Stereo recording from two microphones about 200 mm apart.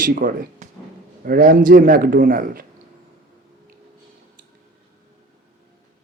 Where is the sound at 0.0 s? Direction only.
45° right (ahead or behind).